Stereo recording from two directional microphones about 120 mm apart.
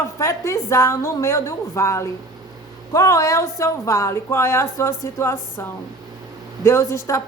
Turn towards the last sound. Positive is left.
turn(degrees=25)  # may be behind; listen again after turning